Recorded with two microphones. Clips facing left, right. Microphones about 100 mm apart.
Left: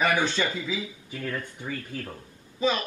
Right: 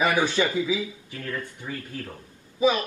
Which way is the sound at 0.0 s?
15° right (ahead or behind).